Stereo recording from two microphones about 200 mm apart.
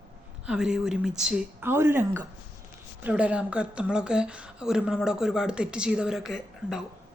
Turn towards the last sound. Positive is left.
turn(degrees=0)  # may be behind; listen again after turning